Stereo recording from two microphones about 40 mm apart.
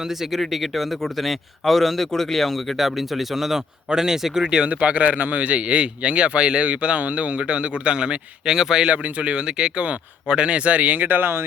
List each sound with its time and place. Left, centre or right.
0.0 s a man's voice: centre
4.4 s speech: right
8.4 s speech: centre
8.9 s speech: right
9.3 s speech: right